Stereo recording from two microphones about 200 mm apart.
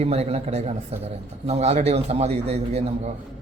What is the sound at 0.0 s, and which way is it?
A man's voice, 30° right (ahead or behind).